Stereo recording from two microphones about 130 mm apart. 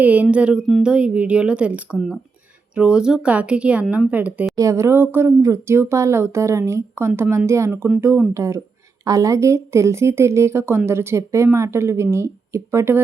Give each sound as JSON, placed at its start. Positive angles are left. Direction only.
{"t": 0.0, "sound": "a woman's voice", "side_deg": -10}
{"t": 4.5, "sound": "speech", "side_deg": -25}